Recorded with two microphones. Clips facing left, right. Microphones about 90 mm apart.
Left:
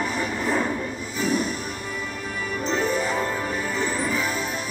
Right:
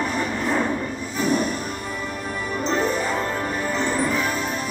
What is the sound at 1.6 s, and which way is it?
Music, 10° right (ahead or behind).